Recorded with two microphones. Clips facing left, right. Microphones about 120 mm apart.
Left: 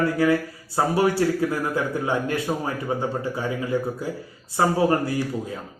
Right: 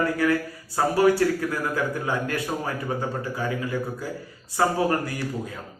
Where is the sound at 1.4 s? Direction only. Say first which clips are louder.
Left 2 dB; 25° left (ahead or behind).